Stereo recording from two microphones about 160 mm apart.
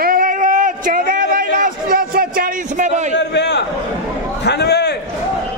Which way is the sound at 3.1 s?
90° left.